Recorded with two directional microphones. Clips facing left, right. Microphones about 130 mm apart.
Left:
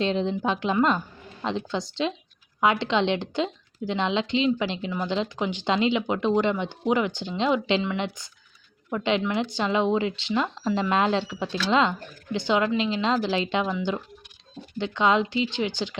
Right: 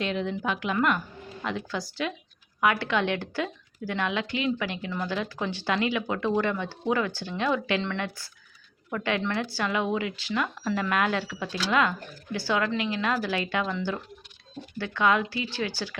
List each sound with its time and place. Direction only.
0.0 s speech: 30° left (ahead or behind)